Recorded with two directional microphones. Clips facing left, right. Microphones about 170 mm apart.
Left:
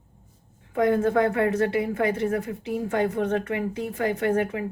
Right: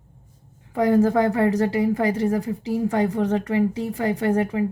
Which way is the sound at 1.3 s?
35° right (ahead or behind).